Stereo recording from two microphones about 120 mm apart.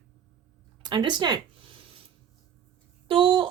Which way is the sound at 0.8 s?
40° right (ahead or behind).